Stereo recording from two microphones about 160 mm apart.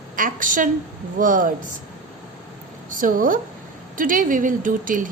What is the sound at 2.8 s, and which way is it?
A woman's voice, 55° right (ahead or behind).